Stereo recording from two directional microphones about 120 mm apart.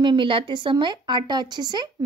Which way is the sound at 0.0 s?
45° right (ahead or behind).